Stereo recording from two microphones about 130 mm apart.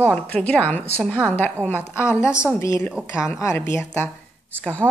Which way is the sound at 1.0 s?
5° right (ahead or behind).